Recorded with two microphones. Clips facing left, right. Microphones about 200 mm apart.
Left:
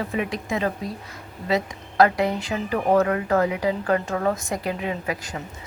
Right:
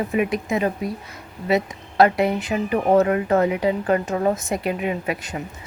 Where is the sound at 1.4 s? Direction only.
20° right (ahead or behind).